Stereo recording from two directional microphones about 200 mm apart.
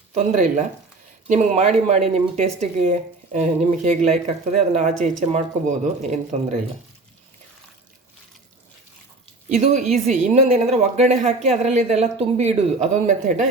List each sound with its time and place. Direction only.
0.1 s speech: 40° right (ahead or behind)
9.5 s speech: 35° right (ahead or behind)